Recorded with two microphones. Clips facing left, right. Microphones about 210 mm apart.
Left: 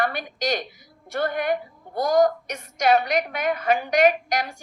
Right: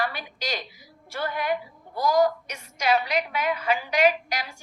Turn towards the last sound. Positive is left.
turn(degrees=55)  # may be behind; listen again after turning